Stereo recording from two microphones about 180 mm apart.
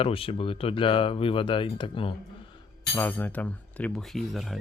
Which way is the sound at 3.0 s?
10° left (ahead or behind).